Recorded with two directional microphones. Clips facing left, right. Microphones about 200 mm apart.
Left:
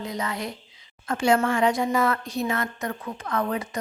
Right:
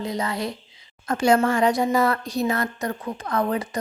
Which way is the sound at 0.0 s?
35° right (ahead or behind).